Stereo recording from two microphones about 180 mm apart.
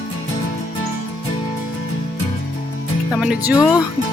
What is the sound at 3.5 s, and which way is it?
Speech, 20° left (ahead or behind).